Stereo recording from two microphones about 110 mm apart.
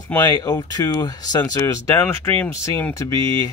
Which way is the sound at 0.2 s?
35° left (ahead or behind).